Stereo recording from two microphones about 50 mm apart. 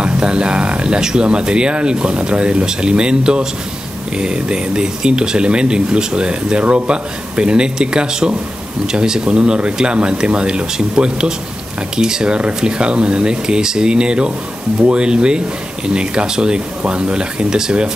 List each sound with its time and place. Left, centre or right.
0.0 s speech: centre